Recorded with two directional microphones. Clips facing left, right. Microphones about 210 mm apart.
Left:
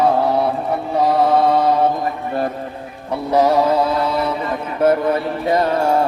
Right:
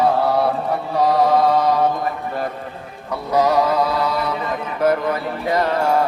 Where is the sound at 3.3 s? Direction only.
30° left (ahead or behind).